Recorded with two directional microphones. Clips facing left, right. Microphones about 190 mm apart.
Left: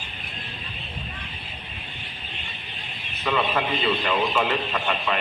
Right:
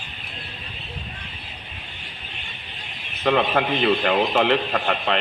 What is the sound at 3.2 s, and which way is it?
A man's voice, 55° right (ahead or behind).